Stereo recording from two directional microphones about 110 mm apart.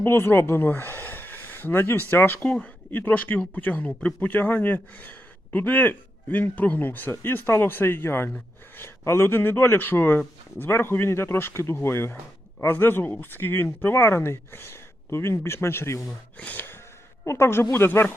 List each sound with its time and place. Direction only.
0.0 s speech: 20° left (ahead or behind)